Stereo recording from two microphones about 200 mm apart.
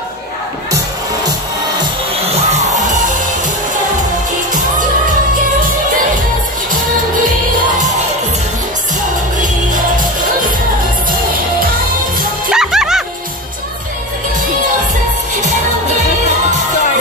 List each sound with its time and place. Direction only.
1.8 s music: 30° right (ahead or behind)
12.4 s music: centre (ahead or behind)